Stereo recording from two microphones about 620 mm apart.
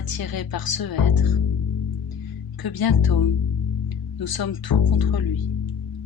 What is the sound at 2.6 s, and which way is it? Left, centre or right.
Speech, left.